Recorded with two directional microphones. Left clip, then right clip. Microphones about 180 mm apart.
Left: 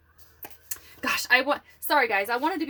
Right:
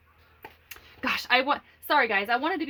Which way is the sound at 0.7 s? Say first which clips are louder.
Left 1 dB; 25° right (ahead or behind).